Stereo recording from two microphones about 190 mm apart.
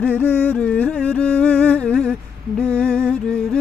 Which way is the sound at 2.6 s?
5° left (ahead or behind).